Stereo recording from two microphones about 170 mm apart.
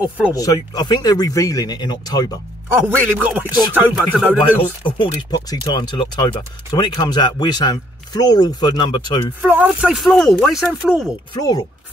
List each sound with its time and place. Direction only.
0.3 s speech: 20° left (ahead or behind)
2.7 s speech: 10° right (ahead or behind)
4.6 s speech: 30° left (ahead or behind)
9.4 s speech: 10° right (ahead or behind)
11.3 s speech: 25° left (ahead or behind)